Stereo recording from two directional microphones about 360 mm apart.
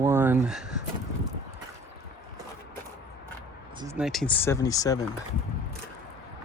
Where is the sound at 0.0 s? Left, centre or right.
Centre.